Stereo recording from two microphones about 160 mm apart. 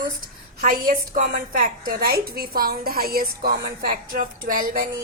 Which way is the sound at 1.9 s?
75° right (ahead or behind).